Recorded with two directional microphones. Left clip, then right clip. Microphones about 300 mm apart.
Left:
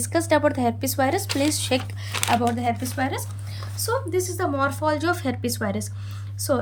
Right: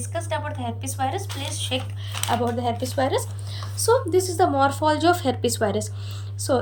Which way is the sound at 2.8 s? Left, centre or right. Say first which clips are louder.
Right 4 dB; centre.